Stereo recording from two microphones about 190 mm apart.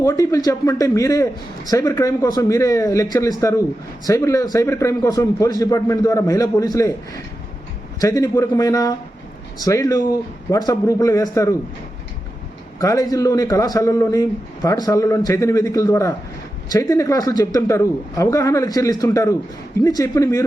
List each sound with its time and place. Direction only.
0.0 s a man's voice: 15° left (ahead or behind)
12.8 s a man's voice: 15° left (ahead or behind)